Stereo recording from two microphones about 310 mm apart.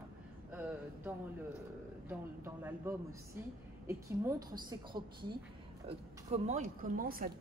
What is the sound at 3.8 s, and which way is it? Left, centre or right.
A woman's voice, centre.